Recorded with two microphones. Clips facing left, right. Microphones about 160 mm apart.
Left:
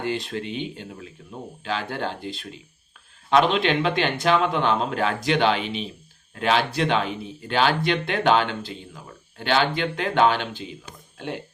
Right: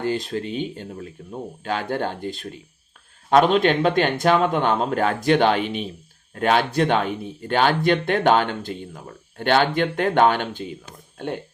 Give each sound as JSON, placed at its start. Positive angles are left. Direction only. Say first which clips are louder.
{"t": 0.0, "sound": "speech", "louder": "right 3 dB", "side_deg": -45}